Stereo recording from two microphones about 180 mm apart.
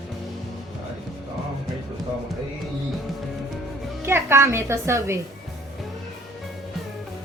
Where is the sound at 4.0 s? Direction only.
15° right (ahead or behind).